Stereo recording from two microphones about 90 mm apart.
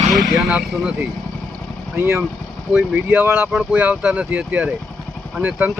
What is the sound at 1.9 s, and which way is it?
Speech, 30° right (ahead or behind).